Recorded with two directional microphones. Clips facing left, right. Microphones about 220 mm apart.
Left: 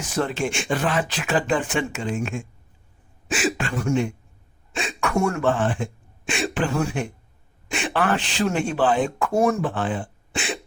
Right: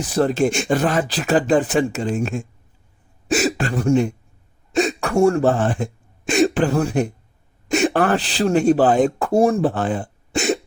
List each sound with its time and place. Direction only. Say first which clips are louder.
0.0 s speech: right 7 dB; 35° right (ahead or behind)